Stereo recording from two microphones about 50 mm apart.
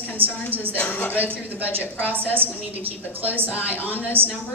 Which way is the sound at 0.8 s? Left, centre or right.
Left.